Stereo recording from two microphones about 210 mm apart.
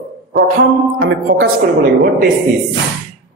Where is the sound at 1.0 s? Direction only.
50° right (ahead or behind).